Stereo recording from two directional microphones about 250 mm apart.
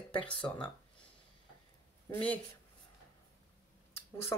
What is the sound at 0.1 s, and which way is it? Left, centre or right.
Speech, centre.